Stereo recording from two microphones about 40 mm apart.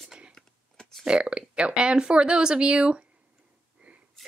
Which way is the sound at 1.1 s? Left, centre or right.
Right.